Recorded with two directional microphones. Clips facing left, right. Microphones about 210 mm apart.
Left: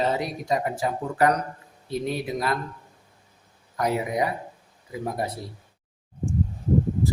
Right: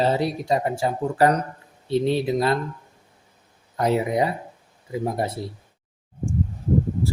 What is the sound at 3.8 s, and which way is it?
Speech, 25° right (ahead or behind).